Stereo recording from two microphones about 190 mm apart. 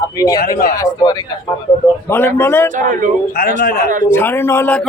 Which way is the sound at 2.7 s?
45° right (ahead or behind).